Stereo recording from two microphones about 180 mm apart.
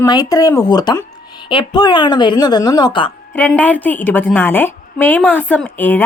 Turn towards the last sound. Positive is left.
turn(degrees=10)  # may be behind; listen again after turning